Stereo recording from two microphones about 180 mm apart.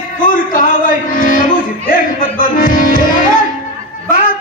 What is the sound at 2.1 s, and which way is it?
Music, 30° left (ahead or behind).